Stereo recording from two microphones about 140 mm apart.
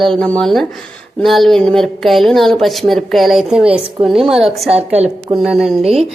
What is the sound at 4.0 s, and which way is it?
Speech, 45° right (ahead or behind).